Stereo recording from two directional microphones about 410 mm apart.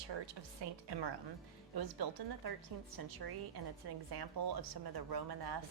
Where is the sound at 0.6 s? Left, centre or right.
Right.